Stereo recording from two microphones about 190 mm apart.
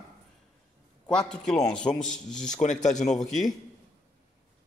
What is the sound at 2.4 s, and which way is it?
Speech, 40° left (ahead or behind).